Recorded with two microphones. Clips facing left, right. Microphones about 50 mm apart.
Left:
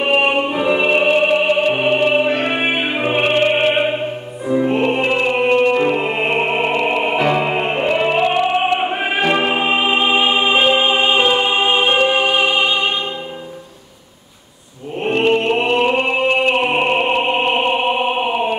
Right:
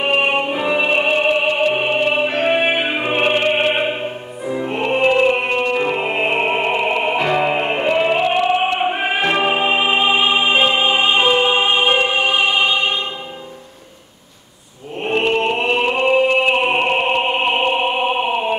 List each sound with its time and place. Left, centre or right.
0.0 s music: centre
3.4 s opera: centre
5.4 s music: centre
15.0 s music: centre